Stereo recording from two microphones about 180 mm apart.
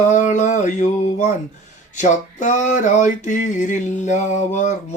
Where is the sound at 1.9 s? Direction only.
45° left (ahead or behind).